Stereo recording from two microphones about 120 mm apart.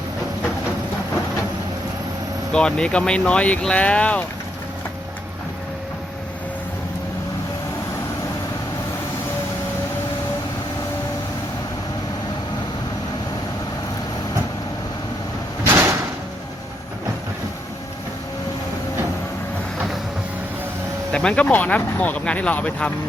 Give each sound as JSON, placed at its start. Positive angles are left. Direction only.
{"t": 2.5, "sound": "speech", "side_deg": 5}
{"t": 15.6, "sound": "a sound", "side_deg": -20}
{"t": 21.1, "sound": "speech", "side_deg": 10}